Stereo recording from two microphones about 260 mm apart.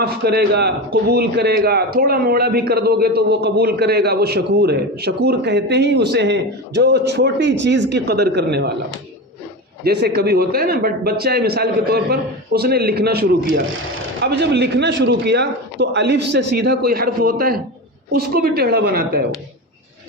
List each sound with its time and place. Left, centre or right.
0.0 s a man's voice: right
9.8 s a man's voice: right